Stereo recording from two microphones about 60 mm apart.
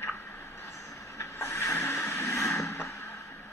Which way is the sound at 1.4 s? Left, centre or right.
Left.